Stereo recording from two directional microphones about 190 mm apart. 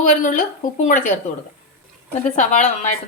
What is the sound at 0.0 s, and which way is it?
A woman's voice, 40° left (ahead or behind).